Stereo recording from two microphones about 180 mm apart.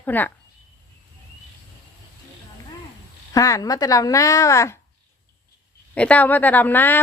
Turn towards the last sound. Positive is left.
turn(degrees=10)  # may be behind; listen again after turning